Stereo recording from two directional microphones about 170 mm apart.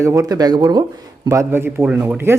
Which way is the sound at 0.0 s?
20° right (ahead or behind).